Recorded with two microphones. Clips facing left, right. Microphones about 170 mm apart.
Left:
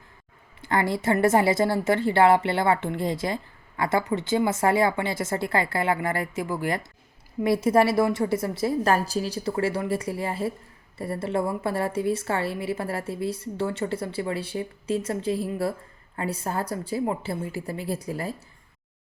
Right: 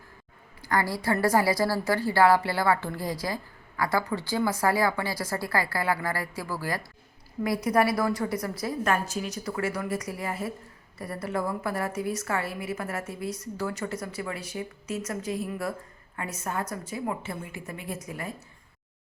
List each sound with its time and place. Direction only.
0.6 s a woman's voice: 25° left (ahead or behind)